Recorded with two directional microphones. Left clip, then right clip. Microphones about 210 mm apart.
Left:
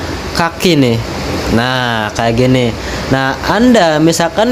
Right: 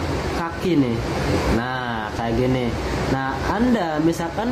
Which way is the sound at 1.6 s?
50° left (ahead or behind).